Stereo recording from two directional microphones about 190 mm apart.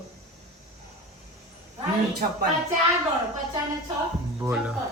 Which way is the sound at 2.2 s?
50° right (ahead or behind).